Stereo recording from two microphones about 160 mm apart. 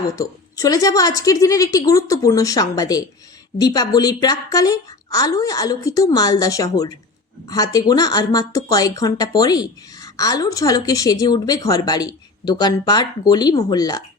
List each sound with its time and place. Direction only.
0.2 s speech: 20° left (ahead or behind)